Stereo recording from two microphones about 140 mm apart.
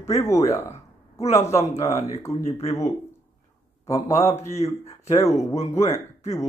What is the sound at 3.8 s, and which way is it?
Speech, 25° left (ahead or behind).